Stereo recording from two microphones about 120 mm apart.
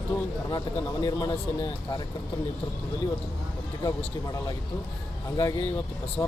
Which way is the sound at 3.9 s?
30° left (ahead or behind).